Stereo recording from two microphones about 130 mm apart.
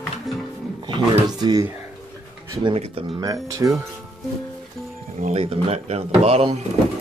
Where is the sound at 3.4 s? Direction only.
25° right (ahead or behind).